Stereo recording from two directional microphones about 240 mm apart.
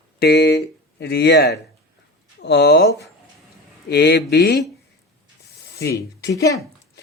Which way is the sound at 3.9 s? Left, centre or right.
Left.